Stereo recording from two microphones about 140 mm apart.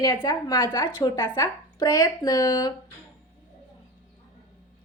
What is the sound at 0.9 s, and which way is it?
Speech, 20° left (ahead or behind).